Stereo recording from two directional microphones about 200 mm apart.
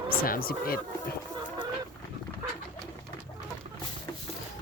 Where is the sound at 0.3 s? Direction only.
45° left (ahead or behind).